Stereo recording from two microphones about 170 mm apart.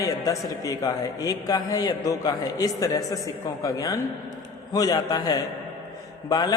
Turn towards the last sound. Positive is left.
turn(degrees=25)  # may be behind; listen again after turning